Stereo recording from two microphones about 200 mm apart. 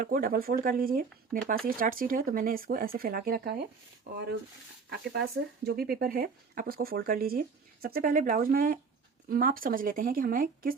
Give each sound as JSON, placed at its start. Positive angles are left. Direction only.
{"t": 0.0, "sound": "speech", "side_deg": -45}